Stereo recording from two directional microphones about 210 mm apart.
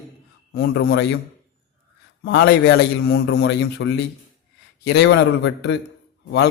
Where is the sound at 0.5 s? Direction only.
50° left (ahead or behind).